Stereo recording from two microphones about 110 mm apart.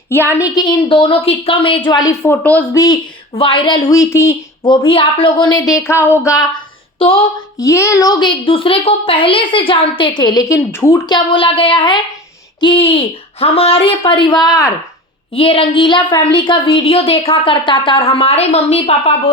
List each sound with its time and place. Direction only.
0.1 s a woman's voice: 20° left (ahead or behind); by 2.0 s 45° left (ahead or behind)
2.2 s speech: 15° left (ahead or behind)
2.7 s a woman's voice: 35° left (ahead or behind)
3.3 s a woman's voice: 55° left (ahead or behind)
3.8 s speech: 30° left (ahead or behind)
4.6 s a woman's voice: 45° left (ahead or behind); by 6.4 s 25° left (ahead or behind)
7.6 s a woman's voice: 25° left (ahead or behind)
10.4 s speech: 25° left (ahead or behind)
11.0 s a woman's voice: 45° left (ahead or behind)
15.3 s a woman's voice: 55° left (ahead or behind)